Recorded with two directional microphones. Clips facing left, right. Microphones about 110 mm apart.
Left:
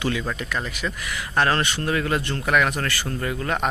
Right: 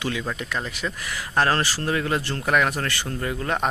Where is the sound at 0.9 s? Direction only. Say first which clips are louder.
Even; 35° right (ahead or behind).